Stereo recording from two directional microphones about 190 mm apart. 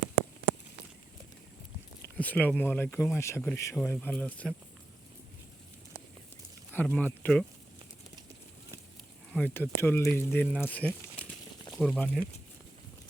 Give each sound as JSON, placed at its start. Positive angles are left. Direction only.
{"t": 2.1, "sound": "speech", "side_deg": 10}
{"t": 6.7, "sound": "speech", "side_deg": 10}
{"t": 9.3, "sound": "speech", "side_deg": 10}